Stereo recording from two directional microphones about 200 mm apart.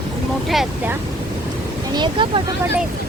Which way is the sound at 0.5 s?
Centre (ahead or behind).